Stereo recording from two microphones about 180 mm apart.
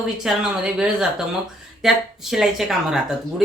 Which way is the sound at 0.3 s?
5° right (ahead or behind).